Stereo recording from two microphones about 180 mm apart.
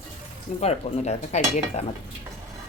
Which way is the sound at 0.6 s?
35° left (ahead or behind).